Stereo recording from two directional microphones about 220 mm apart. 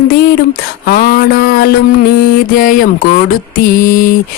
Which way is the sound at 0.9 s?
40° left (ahead or behind).